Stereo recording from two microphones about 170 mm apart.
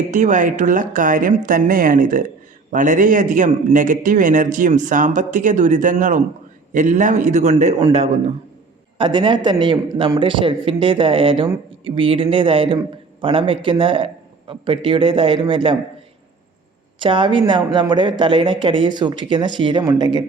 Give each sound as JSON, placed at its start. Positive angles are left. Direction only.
{"t": 0.1, "sound": "a man's voice", "side_deg": -45}
{"t": 17.0, "sound": "speech", "side_deg": -30}